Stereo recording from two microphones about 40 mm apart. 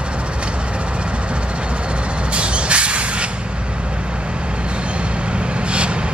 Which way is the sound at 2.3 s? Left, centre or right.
Right.